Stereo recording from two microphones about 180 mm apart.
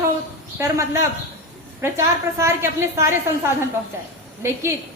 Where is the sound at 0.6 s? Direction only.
15° right (ahead or behind).